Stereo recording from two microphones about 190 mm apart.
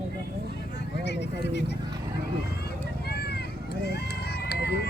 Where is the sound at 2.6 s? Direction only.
55° left (ahead or behind).